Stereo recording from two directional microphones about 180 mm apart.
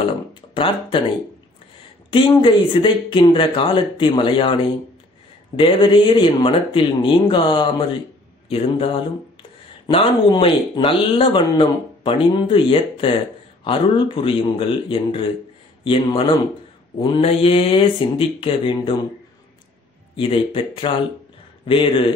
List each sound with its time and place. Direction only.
0.3 s a sound: 30° left (ahead or behind)
2.0 s speech: 30° left (ahead or behind)
5.6 s speech: 30° left (ahead or behind)
20.2 s speech: 30° left (ahead or behind)